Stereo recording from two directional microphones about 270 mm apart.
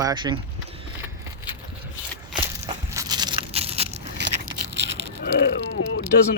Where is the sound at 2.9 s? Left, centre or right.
Centre.